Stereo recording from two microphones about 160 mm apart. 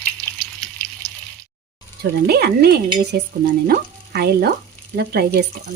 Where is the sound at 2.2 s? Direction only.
85° right.